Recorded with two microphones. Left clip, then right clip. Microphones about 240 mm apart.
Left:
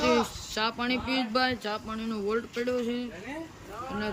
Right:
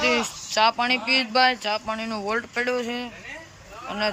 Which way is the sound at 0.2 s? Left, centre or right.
Centre.